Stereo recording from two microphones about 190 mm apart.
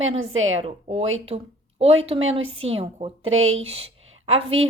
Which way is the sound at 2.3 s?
30° right (ahead or behind).